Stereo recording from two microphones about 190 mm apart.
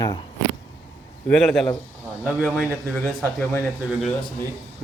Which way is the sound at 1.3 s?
Centre (ahead or behind).